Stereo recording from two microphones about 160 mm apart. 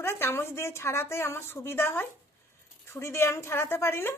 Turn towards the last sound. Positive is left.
turn(degrees=15)  # may be behind; listen again after turning